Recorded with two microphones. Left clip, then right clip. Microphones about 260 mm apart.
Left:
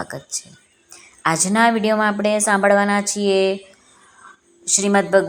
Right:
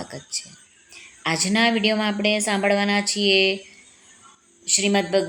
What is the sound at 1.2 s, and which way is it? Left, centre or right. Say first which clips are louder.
Speech: left 4 dB; centre.